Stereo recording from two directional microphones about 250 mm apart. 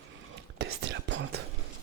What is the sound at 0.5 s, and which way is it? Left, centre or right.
Whispering, right.